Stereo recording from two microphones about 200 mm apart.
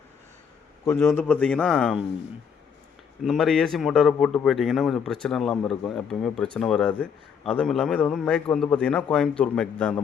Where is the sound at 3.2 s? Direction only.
Centre (ahead or behind).